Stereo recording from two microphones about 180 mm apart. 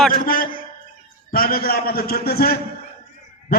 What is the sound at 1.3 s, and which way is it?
A man's voice, 55° left (ahead or behind).